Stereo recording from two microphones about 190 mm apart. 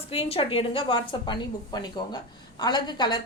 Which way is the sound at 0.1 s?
30° left (ahead or behind).